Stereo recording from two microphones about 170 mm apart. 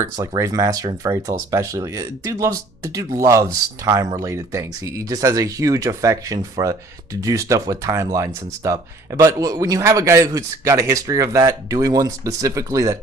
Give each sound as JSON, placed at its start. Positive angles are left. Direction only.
{"t": 0.0, "sound": "speech", "side_deg": -20}